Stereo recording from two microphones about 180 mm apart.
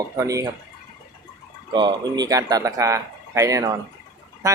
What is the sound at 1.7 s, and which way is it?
Speech, 25° right (ahead or behind).